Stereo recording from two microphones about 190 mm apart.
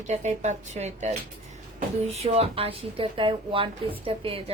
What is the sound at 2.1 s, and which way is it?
A woman's voice, 30° right (ahead or behind).